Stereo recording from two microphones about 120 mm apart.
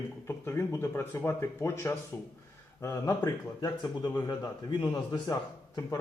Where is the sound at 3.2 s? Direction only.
35° left (ahead or behind).